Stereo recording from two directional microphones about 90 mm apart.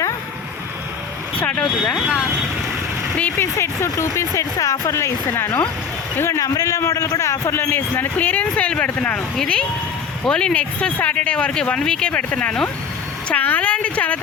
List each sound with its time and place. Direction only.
1.4 s speech: 15° left (ahead or behind)
2.0 s speech: 5° right (ahead or behind)
3.2 s a sound: 20° left (ahead or behind)
3.4 s a man's voice: 30° left (ahead or behind)